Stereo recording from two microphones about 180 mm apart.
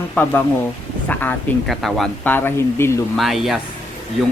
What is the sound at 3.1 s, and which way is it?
Speech, centre (ahead or behind).